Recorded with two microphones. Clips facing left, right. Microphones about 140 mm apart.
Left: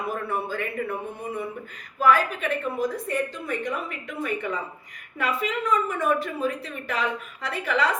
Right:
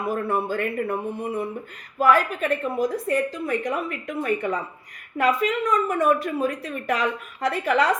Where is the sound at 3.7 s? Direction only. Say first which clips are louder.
Right 4 dB; 40° right (ahead or behind).